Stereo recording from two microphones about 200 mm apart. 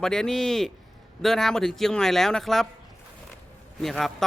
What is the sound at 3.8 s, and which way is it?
Speech, centre (ahead or behind).